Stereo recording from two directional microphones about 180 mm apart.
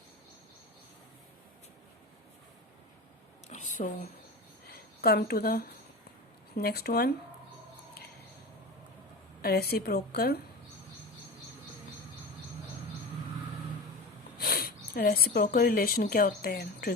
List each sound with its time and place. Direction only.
3.5 s speech: 45° left (ahead or behind)
4.7 s speech: 60° left (ahead or behind)
9.4 s speech: 60° left (ahead or behind)
14.3 s a sound: 55° left (ahead or behind)
14.9 s speech: 55° left (ahead or behind)